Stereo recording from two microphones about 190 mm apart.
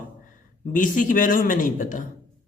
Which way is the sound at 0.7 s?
45° left (ahead or behind).